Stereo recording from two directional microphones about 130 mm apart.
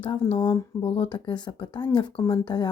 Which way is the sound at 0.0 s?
40° left (ahead or behind).